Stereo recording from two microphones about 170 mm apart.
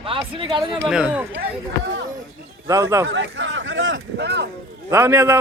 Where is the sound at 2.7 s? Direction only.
20° right (ahead or behind).